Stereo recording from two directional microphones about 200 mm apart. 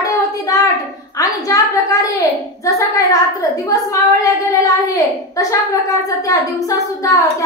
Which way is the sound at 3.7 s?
15° left (ahead or behind).